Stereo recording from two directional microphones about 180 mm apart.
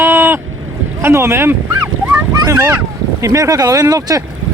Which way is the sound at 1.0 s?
15° right (ahead or behind).